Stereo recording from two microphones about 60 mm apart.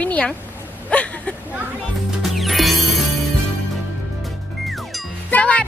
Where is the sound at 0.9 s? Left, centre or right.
Left.